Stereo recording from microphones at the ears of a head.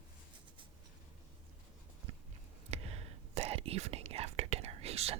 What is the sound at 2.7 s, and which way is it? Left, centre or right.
Whispering, right.